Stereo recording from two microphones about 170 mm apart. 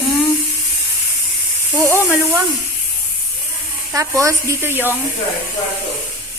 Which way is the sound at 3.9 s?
20° right (ahead or behind).